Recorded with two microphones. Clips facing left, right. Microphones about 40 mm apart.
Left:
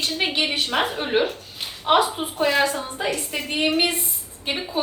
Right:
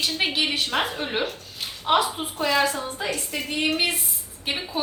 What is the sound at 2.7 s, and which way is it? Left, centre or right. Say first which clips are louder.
Speech: left 1 dB; centre.